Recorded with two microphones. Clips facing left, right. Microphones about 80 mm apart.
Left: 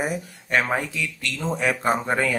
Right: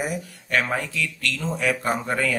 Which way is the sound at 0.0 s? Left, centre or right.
Left.